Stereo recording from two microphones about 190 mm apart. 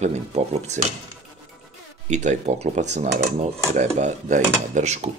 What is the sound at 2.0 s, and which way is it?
Speech, 40° right (ahead or behind).